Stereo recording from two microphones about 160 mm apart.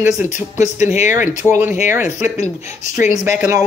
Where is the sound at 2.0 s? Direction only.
50° left (ahead or behind).